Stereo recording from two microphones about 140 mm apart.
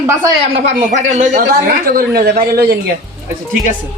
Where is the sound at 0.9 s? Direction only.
60° right (ahead or behind); by 2.8 s 90° right.